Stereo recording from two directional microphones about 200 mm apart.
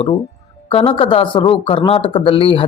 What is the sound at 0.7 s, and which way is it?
Speech, 30° left (ahead or behind).